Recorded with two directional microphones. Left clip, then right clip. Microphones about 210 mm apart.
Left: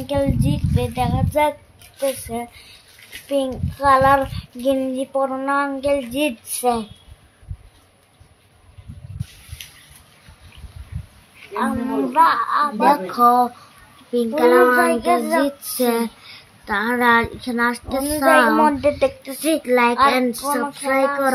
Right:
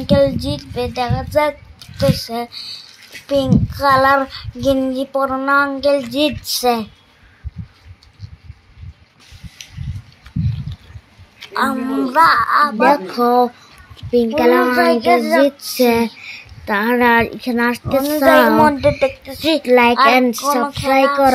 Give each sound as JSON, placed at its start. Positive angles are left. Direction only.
{"t": 0.1, "sound": "child singing", "side_deg": -20}
{"t": 3.3, "sound": "child singing", "side_deg": -20}
{"t": 11.5, "sound": "child singing", "side_deg": -25}
{"t": 12.7, "sound": "child singing", "side_deg": -15}